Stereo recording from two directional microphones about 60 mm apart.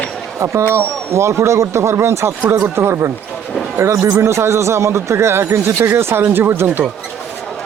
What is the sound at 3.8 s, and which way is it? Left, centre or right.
Speech, right.